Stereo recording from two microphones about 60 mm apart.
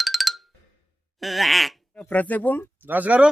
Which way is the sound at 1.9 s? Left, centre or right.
Left.